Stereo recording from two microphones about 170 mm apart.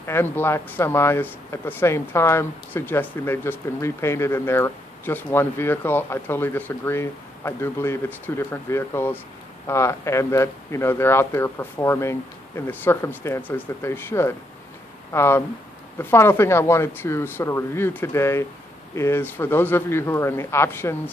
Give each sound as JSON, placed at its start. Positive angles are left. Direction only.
{"t": 0.0, "sound": "speech", "side_deg": 15}